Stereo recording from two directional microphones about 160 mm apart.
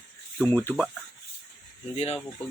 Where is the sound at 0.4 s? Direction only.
10° left (ahead or behind).